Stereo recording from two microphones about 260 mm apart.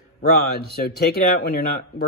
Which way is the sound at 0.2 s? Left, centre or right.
Left.